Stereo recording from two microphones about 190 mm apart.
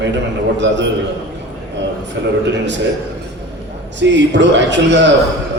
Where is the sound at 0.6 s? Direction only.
70° right (ahead or behind).